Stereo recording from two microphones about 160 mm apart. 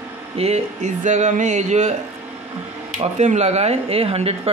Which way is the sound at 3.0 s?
45° right (ahead or behind).